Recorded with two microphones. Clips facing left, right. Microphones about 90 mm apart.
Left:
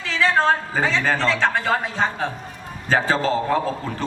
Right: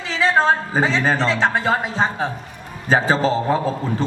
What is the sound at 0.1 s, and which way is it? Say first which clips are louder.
A man's voice: right 2 dB; 20° right (ahead or behind).